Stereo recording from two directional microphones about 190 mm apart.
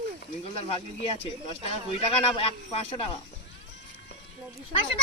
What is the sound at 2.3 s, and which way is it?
Speech, 30° left (ahead or behind).